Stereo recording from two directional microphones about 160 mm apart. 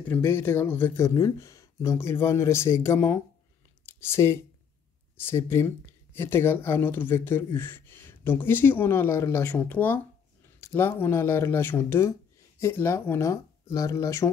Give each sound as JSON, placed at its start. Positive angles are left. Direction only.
{"t": 0.1, "sound": "speech", "side_deg": 15}